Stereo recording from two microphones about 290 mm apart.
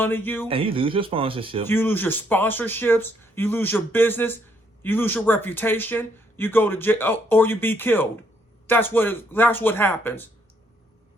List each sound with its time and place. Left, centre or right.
0.0 s speech: centre
0.4 s speech: centre
1.6 s speech: centre